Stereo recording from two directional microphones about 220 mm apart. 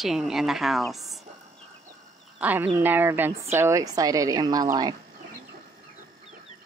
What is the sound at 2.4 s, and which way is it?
A woman's voice, 5° right (ahead or behind).